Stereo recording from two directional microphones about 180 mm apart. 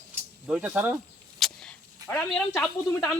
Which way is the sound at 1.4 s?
Centre (ahead or behind).